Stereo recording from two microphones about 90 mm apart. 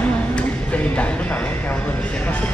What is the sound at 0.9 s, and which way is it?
Speech, 15° left (ahead or behind).